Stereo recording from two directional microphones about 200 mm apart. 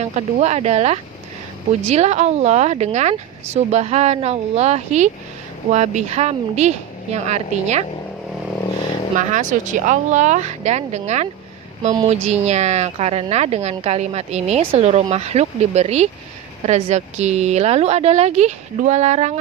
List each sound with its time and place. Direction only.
0.1 s speech: 35° right (ahead or behind)
9.1 s speech: 40° right (ahead or behind)